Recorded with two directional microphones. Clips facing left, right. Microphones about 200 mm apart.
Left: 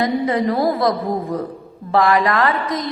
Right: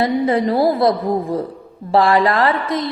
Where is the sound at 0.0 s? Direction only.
30° right (ahead or behind).